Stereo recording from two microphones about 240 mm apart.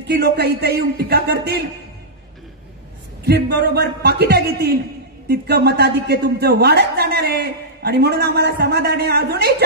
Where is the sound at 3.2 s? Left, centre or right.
Right.